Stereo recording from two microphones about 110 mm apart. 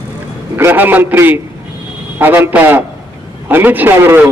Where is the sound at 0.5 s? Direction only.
20° right (ahead or behind).